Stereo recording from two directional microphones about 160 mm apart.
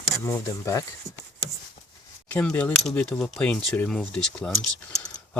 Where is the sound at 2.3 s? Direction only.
10° left (ahead or behind).